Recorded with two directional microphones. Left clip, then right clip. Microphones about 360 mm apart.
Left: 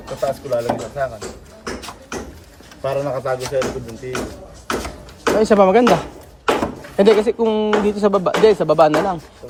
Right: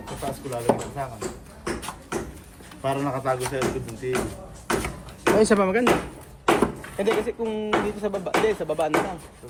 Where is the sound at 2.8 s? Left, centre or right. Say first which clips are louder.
Left 5 dB; right.